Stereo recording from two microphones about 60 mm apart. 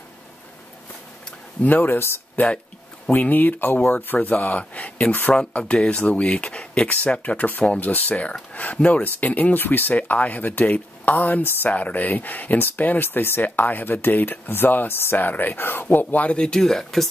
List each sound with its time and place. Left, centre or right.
1.6 s speech: left
5.3 s speech: centre